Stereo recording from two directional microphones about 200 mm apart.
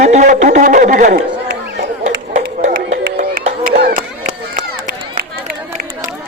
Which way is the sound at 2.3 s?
35° right (ahead or behind).